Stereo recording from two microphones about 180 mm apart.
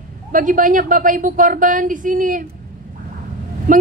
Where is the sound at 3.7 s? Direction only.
45° right (ahead or behind).